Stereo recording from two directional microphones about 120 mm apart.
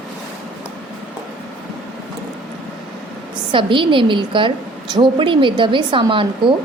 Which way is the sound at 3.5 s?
45° right (ahead or behind).